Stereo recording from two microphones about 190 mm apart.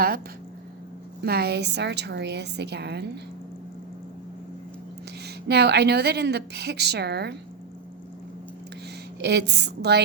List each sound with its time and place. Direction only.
1.2 s speech: 55° right (ahead or behind)
5.2 s speech: 60° right (ahead or behind)
9.2 s speech: 60° right (ahead or behind)